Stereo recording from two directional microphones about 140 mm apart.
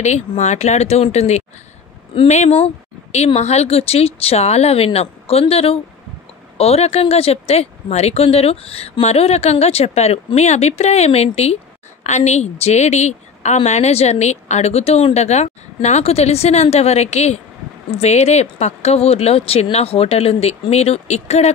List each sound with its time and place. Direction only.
0.0 s speech: 55° left (ahead or behind)